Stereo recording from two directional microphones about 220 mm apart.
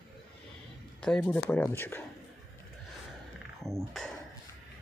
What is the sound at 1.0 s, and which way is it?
Speech, 5° left (ahead or behind).